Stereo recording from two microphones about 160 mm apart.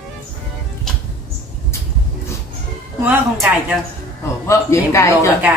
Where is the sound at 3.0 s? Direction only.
5° right (ahead or behind).